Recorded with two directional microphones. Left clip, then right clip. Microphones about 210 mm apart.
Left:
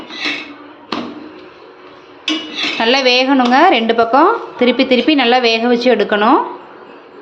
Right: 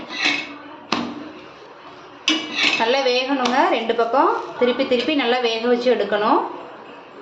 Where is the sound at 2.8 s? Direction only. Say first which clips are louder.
Left 12 dB; 45° left (ahead or behind).